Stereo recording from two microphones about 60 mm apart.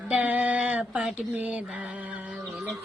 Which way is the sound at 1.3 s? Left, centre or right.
Right.